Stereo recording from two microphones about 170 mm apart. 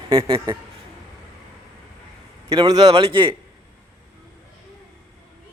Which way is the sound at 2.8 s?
35° right (ahead or behind).